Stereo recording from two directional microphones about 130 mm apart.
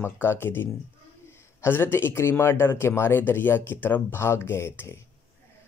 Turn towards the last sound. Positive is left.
turn(degrees=20)  # may be behind; listen again after turning